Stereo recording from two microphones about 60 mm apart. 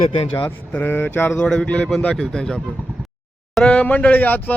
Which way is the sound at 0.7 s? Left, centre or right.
Left.